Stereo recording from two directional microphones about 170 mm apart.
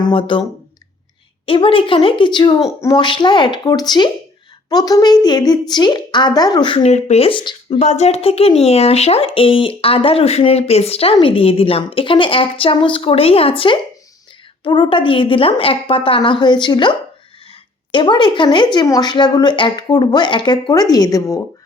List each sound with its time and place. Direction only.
0.0 s speech: 30° left (ahead or behind)
1.5 s a woman's voice: 30° left (ahead or behind)
7.8 s a woman's voice: 40° left (ahead or behind); by 21.4 s 20° left (ahead or behind)